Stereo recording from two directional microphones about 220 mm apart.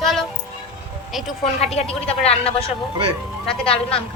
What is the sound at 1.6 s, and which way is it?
A woman's voice, 30° left (ahead or behind).